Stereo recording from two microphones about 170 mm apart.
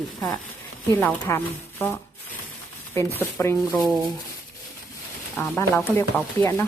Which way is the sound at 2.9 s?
15° left (ahead or behind).